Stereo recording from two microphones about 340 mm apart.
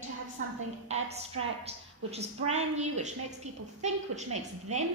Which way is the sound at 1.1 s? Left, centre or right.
Centre.